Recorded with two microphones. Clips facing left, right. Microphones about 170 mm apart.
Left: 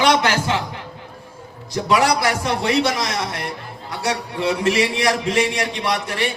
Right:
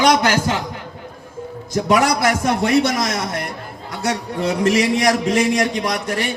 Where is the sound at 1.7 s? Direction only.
45° right (ahead or behind).